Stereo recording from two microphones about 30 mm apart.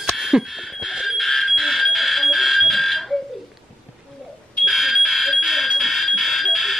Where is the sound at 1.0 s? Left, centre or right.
Centre.